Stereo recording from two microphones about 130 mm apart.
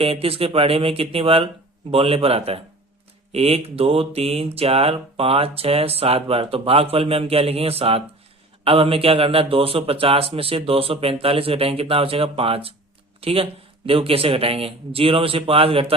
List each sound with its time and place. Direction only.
0.0 s mantra: 45° right (ahead or behind)